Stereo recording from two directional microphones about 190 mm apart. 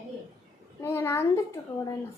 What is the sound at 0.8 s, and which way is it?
Speech, 10° left (ahead or behind).